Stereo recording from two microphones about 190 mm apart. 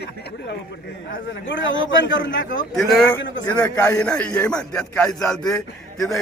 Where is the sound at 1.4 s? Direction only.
75° left (ahead or behind).